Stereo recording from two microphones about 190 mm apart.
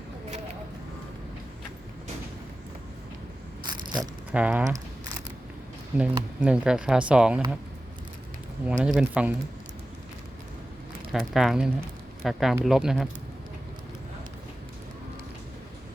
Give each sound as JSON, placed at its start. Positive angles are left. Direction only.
{"t": 3.7, "sound": "a sound", "side_deg": -20}
{"t": 4.3, "sound": "speech", "side_deg": -5}
{"t": 6.0, "sound": "speech", "side_deg": -5}
{"t": 8.8, "sound": "speech", "side_deg": -5}
{"t": 11.1, "sound": "speech", "side_deg": 0}